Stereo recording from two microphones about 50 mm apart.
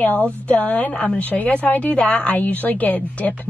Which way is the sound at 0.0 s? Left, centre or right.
Left.